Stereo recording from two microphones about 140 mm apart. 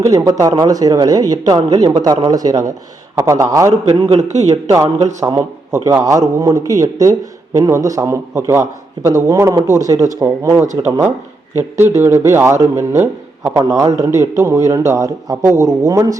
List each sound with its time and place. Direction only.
0.0 s a man's voice: 25° right (ahead or behind)
4.3 s a man's voice: 55° right (ahead or behind)
4.7 s a man's voice: 25° right (ahead or behind)